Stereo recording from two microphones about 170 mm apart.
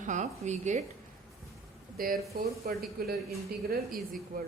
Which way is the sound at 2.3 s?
65° right (ahead or behind).